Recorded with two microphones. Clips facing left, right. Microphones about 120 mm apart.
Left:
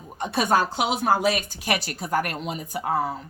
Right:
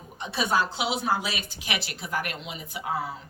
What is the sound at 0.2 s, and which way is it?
A woman's voice, 50° left (ahead or behind).